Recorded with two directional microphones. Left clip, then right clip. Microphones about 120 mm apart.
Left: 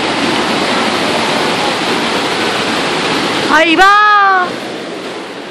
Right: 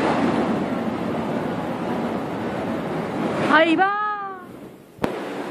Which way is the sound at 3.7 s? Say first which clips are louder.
Left 15 dB; 35° left (ahead or behind).